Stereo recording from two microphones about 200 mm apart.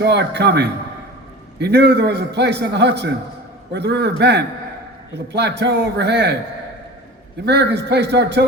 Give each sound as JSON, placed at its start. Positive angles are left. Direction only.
{"t": 0.0, "sound": "a man's voice", "side_deg": -55}
{"t": 7.4, "sound": "a man's voice", "side_deg": -55}